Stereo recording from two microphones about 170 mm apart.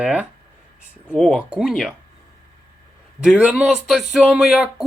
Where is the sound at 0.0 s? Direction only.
10° right (ahead or behind).